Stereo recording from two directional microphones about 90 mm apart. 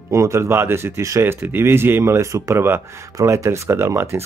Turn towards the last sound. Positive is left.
turn(degrees=-30)  # may be behind; listen again after turning